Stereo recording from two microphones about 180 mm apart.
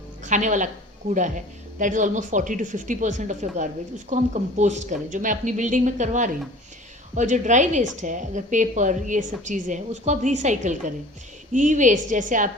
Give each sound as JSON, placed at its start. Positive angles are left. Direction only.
{"t": 0.3, "sound": "a woman's voice", "side_deg": -45}
{"t": 1.8, "sound": "a woman's voice", "side_deg": -45}